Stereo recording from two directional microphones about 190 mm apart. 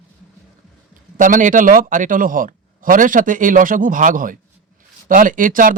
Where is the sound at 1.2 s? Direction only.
45° right (ahead or behind).